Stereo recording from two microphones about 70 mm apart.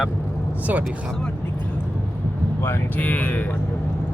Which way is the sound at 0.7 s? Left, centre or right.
Right.